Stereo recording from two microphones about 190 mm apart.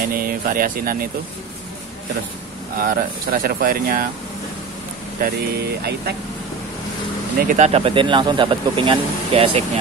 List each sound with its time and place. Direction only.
0.1 s speech: 50° right (ahead or behind)
2.8 s speech: 50° right (ahead or behind)
5.2 s speech: 55° right (ahead or behind)
7.4 s speech: 40° right (ahead or behind)